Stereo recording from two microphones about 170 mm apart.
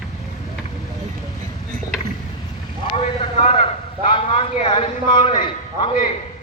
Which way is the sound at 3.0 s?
35° left (ahead or behind).